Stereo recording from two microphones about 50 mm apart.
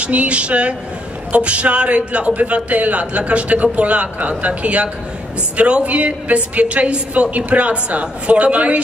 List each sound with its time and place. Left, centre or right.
0.0 s a man's voice: right